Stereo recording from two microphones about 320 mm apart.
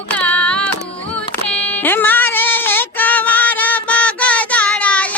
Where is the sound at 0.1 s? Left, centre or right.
Centre.